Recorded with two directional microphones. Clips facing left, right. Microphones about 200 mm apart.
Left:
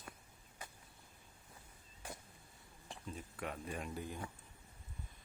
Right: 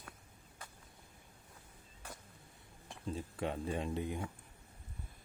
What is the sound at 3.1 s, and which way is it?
Speech, 30° right (ahead or behind).